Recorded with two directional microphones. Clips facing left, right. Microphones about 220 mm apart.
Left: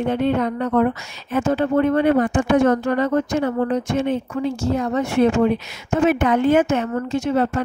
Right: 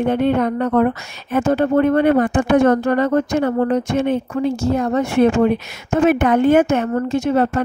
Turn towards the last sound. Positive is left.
turn(degrees=-45)  # may be behind; listen again after turning